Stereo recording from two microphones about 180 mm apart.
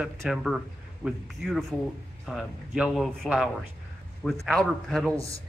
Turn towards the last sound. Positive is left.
turn(degrees=-15)  # may be behind; listen again after turning